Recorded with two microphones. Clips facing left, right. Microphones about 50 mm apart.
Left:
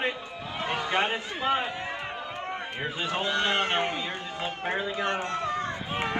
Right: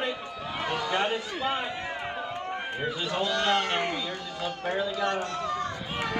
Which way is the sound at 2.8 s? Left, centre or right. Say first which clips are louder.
Even; left.